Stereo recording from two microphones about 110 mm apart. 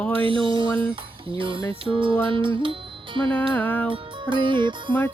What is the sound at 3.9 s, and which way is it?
Music, 45° right (ahead or behind).